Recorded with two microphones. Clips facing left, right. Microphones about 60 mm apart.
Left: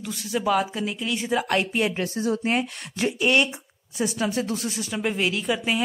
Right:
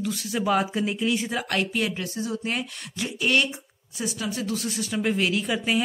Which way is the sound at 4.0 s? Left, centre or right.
Left.